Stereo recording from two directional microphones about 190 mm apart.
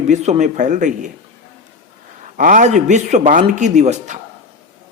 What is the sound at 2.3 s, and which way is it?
A man's voice, 45° right (ahead or behind).